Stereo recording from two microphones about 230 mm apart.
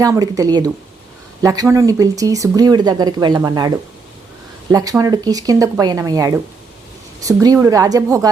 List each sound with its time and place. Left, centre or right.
0.0 s speech: centre
4.7 s speech: centre